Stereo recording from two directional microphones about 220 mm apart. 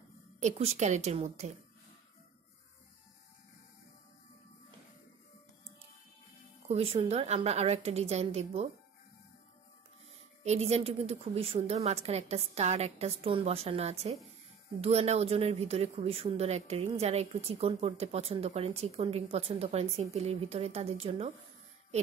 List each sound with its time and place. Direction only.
0.4 s a woman's voice: 30° right (ahead or behind)
6.7 s speech: 25° right (ahead or behind)
10.4 s a woman's voice: 30° right (ahead or behind)